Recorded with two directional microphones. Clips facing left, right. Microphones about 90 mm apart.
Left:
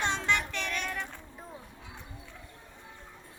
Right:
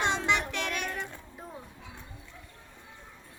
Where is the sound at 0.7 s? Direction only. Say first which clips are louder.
Right 1 dB; 15° right (ahead or behind).